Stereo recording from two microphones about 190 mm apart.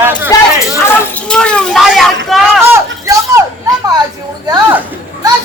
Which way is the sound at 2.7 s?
15° right (ahead or behind).